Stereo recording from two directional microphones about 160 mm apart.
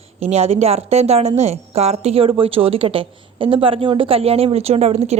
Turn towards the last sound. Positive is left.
turn(degrees=-40)  # may be behind; listen again after turning